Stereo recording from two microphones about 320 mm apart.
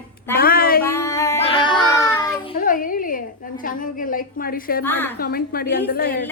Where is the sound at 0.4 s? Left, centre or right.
Left.